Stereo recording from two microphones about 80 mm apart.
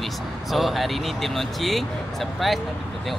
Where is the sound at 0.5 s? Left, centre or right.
Centre.